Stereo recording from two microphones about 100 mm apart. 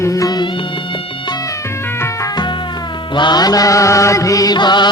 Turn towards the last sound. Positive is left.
turn(degrees=45)  # may be behind; listen again after turning